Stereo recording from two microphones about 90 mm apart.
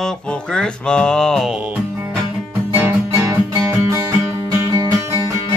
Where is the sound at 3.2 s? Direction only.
30° right (ahead or behind).